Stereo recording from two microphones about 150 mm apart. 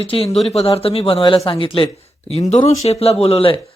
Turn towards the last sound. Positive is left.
turn(degrees=40)  # may be behind; listen again after turning